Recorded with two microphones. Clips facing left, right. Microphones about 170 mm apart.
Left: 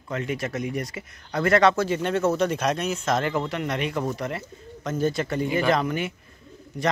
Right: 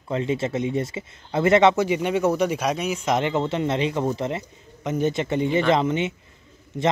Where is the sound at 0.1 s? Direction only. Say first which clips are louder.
Right 4 dB; 25° right (ahead or behind).